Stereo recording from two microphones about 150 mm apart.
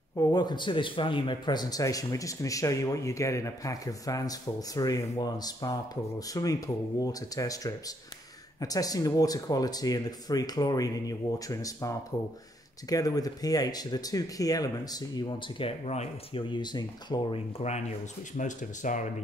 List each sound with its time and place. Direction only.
0.1 s speech: 25° left (ahead or behind)
12.9 s speech: 25° left (ahead or behind)
15.8 s speech: 45° left (ahead or behind)
16.4 s speech: 30° left (ahead or behind)
17.6 s speech: 45° left (ahead or behind)